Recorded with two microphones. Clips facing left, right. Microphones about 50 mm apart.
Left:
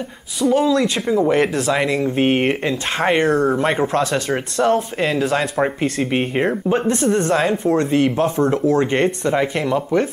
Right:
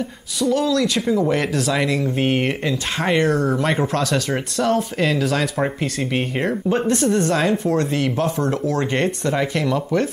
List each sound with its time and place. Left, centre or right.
0.4 s speech: centre